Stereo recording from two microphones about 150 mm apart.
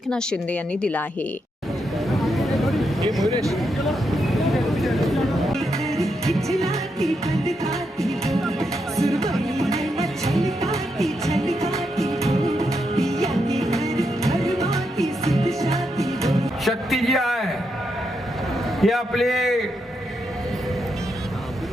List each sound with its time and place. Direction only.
0.1 s a woman's voice: 5° left (ahead or behind)
2.0 s a sound: centre (ahead or behind)
6.2 s a man's voice: centre (ahead or behind)
7.7 s music: centre (ahead or behind)
9.6 s music: 20° right (ahead or behind)
9.8 s music: centre (ahead or behind)
10.4 s music: 20° right (ahead or behind)
11.0 s music: centre (ahead or behind)
18.8 s a man's voice: centre (ahead or behind)